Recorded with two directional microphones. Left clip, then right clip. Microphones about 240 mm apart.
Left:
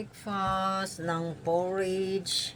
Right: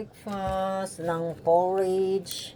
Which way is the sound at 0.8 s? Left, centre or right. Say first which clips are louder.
Right 2 dB; centre.